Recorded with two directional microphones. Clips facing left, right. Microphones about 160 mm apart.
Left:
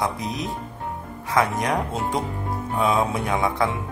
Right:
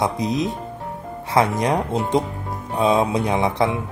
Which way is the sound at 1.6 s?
25° right (ahead or behind).